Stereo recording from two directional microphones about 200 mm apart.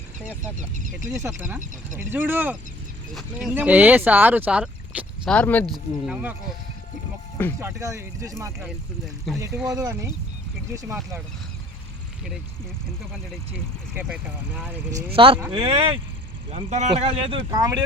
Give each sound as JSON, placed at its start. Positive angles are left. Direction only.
{"t": 0.2, "sound": "speech", "side_deg": -5}
{"t": 0.5, "sound": "speech", "side_deg": -40}
{"t": 1.1, "sound": "speech", "side_deg": -15}
{"t": 7.6, "sound": "speech", "side_deg": -15}
{"t": 9.3, "sound": "speech", "side_deg": 0}
{"t": 9.7, "sound": "speech", "side_deg": -15}
{"t": 13.5, "sound": "speech", "side_deg": -10}
{"t": 15.1, "sound": "speech", "side_deg": -25}